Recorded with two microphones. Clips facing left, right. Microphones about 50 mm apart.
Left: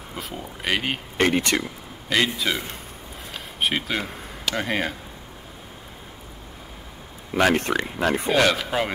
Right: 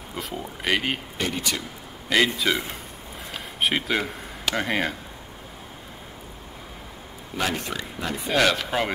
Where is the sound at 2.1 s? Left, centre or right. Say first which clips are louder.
Right 1 dB; centre.